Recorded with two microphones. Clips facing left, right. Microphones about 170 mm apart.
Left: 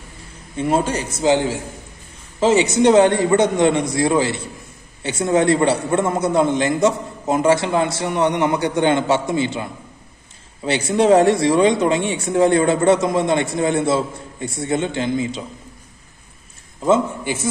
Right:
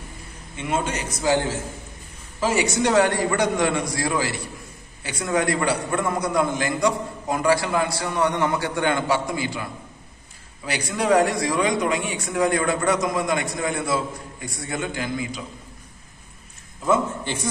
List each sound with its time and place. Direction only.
0.6 s a man's voice: 35° left (ahead or behind)
1.2 s a man's voice: 20° left (ahead or behind)